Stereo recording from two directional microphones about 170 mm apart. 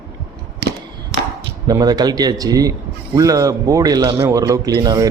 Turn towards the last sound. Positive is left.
turn(degrees=-20)  # may be behind; listen again after turning